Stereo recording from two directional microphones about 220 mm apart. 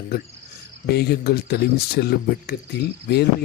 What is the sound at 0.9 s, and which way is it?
Speech, 45° left (ahead or behind).